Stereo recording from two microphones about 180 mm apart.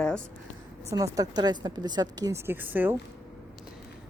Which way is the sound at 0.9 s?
20° right (ahead or behind).